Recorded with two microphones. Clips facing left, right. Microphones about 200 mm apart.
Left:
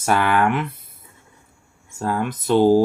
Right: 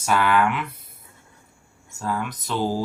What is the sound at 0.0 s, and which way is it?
Speech, 55° left (ahead or behind).